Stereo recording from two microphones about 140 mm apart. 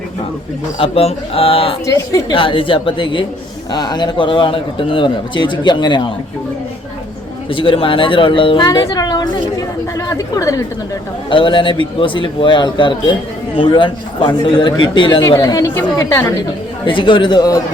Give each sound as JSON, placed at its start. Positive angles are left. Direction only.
{"t": 0.8, "sound": "a man's voice", "side_deg": 45}
{"t": 7.5, "sound": "a man's voice", "side_deg": 40}
{"t": 11.3, "sound": "a man's voice", "side_deg": 35}
{"t": 16.8, "sound": "a man's voice", "side_deg": 35}